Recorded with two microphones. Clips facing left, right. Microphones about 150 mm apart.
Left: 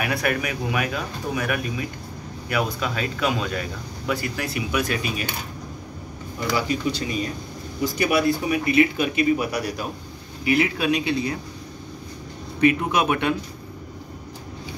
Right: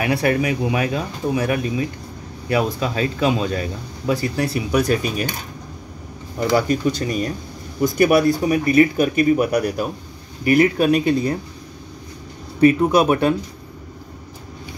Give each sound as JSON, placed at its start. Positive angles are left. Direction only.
{"t": 0.0, "sound": "a man's voice", "side_deg": -30}
{"t": 6.5, "sound": "speech", "side_deg": -45}
{"t": 12.5, "sound": "a man's voice", "side_deg": -35}